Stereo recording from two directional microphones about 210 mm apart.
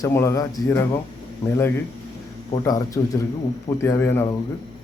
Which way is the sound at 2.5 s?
15° left (ahead or behind).